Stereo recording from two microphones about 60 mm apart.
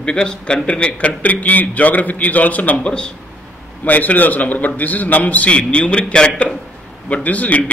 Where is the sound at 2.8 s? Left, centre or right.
Centre.